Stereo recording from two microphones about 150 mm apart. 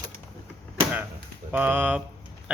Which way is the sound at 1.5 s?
10° right (ahead or behind).